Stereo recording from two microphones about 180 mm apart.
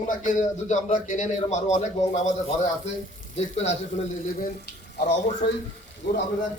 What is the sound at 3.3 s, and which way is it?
Speech, 35° left (ahead or behind).